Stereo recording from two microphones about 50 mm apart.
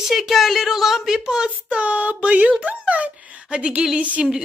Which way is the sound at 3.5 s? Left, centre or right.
Right.